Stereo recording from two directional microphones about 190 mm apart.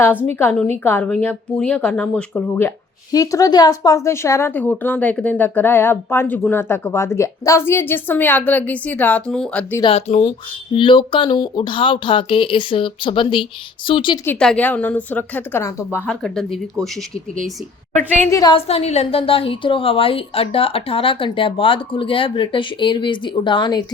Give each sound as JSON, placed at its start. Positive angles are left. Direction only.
{"t": 0.0, "sound": "speech", "side_deg": 10}
{"t": 9.8, "sound": "a woman's voice", "side_deg": 30}
{"t": 14.3, "sound": "speech", "side_deg": 5}
{"t": 18.3, "sound": "a woman's voice", "side_deg": 20}